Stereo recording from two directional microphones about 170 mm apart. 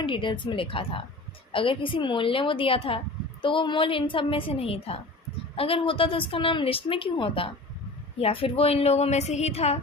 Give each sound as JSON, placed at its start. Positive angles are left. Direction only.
{"t": 0.0, "sound": "a woman's voice", "side_deg": 30}